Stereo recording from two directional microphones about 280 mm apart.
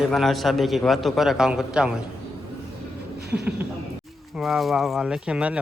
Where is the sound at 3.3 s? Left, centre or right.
Right.